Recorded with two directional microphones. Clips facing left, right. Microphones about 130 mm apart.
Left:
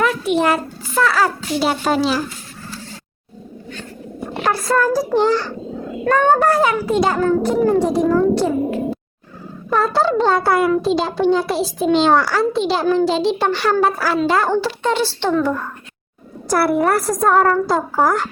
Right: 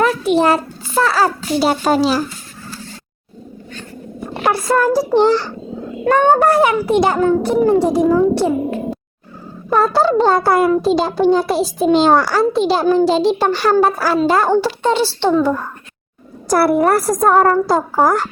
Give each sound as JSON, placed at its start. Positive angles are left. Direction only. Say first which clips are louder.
{"t": 0.0, "sound": "a child's voice", "louder": "right 3 dB", "side_deg": -35}
{"t": 4.4, "sound": "a child's voice", "louder": "right 2 dB", "side_deg": -25}
{"t": 8.0, "sound": "a child's voice", "louder": "right 2 dB", "side_deg": -5}
{"t": 9.6, "sound": "a child's voice", "louder": "right 3 dB", "side_deg": -35}